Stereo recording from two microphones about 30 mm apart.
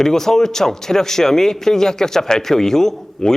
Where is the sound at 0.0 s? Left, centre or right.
Centre.